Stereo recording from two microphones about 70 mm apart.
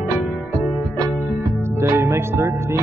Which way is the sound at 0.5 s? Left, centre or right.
Right.